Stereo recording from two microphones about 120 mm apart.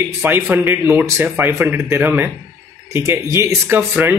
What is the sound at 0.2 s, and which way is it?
Speech, 20° right (ahead or behind).